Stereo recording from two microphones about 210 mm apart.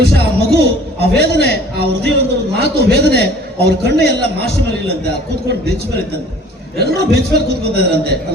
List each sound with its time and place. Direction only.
0.0 s a sound: 50° right (ahead or behind)
1.1 s a man's voice: 50° right (ahead or behind)
6.7 s a man's voice: 50° right (ahead or behind)